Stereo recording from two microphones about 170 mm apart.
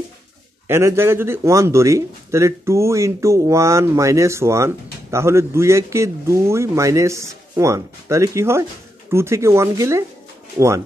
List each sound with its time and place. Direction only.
0.7 s speech: 15° right (ahead or behind)